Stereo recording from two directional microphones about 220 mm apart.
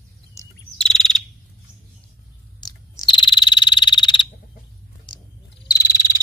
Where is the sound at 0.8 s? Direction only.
5° left (ahead or behind).